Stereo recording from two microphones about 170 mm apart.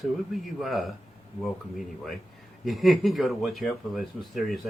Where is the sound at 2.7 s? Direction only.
Centre (ahead or behind).